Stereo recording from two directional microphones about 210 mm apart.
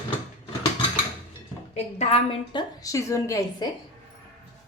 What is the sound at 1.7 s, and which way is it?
A woman's voice, 30° left (ahead or behind).